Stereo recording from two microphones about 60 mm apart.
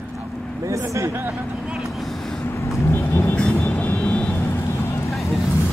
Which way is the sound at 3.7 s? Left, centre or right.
Left.